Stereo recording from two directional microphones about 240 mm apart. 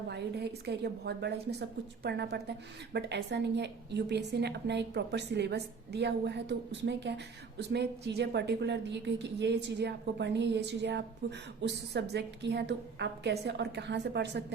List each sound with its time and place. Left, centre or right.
0.1 s a woman's voice: right